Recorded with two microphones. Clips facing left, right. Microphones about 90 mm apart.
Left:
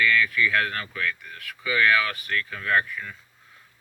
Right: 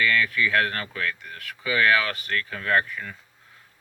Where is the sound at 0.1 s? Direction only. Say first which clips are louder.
Even; 45° right (ahead or behind).